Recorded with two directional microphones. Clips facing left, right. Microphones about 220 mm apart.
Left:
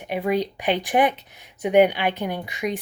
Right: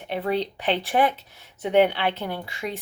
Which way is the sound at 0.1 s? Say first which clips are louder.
Left 2 dB; 10° left (ahead or behind).